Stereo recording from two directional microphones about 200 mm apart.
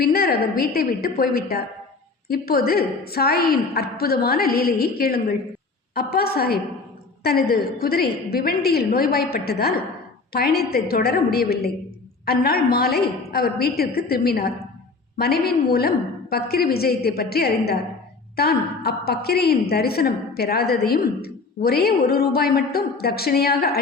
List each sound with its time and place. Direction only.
0.0 s a woman's voice: 50° left (ahead or behind)